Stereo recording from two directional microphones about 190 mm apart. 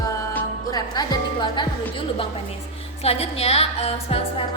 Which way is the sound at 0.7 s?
20° left (ahead or behind).